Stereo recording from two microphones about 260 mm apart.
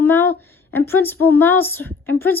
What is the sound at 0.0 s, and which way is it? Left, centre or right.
Speech, centre.